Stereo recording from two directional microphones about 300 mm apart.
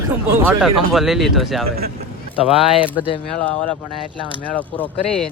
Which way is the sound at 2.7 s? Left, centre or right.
Centre.